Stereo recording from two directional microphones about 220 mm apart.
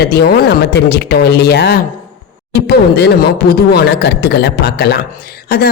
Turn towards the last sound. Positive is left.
turn(degrees=45)  # may be behind; listen again after turning